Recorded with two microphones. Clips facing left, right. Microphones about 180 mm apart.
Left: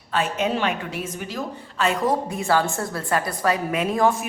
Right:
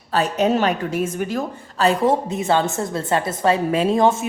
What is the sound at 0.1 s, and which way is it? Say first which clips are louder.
A woman's voice: right 5 dB; 40° right (ahead or behind).